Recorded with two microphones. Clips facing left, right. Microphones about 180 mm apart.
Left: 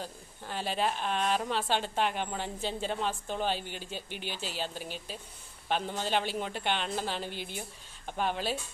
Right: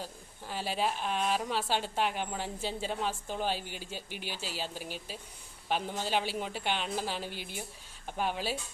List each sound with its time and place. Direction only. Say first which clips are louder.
0.0 s a woman's voice: left 1 dB; 5° right (ahead or behind)